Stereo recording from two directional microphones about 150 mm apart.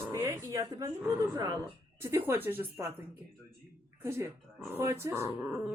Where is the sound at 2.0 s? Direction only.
15° right (ahead or behind).